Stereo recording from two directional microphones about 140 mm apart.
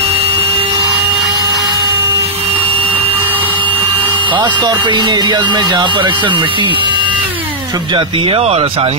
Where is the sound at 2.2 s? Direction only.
40° right (ahead or behind).